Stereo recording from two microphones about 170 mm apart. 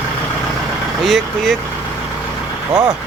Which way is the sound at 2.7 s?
25° right (ahead or behind).